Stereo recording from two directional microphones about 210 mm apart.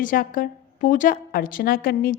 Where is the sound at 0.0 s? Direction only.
40° left (ahead or behind).